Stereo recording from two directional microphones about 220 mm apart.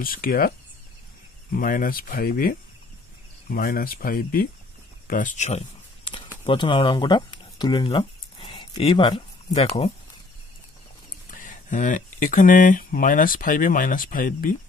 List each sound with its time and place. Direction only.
0.0 s speech: 40° left (ahead or behind)
5.0 s a sound: 35° left (ahead or behind)
11.3 s speech: 35° left (ahead or behind)